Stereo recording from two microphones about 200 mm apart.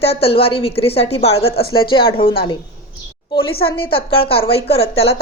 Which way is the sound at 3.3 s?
25° left (ahead or behind).